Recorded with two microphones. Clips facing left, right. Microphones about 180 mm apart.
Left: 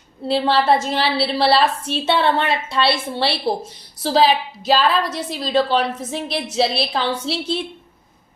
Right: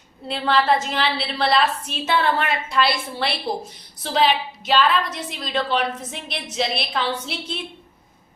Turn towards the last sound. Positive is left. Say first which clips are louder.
# left 6 dB
turn(degrees=30)  # may be behind; listen again after turning